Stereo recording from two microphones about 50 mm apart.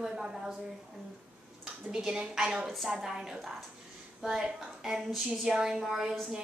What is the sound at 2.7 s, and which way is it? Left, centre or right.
A woman's voice, centre.